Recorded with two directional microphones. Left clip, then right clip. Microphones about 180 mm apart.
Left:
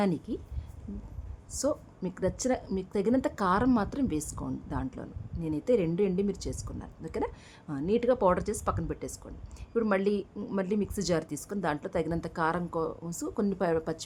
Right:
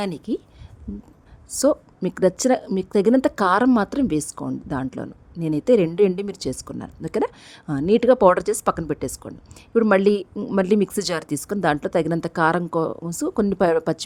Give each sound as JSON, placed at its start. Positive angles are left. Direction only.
{"t": 0.0, "sound": "a woman's voice", "side_deg": -50}
{"t": 1.5, "sound": "a woman's voice", "side_deg": -50}